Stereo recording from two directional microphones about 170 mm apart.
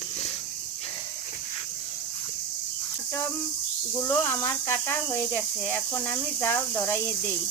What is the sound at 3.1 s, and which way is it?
Speech, 15° left (ahead or behind).